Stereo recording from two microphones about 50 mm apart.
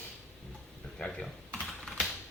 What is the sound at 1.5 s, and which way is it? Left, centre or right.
Typing, centre.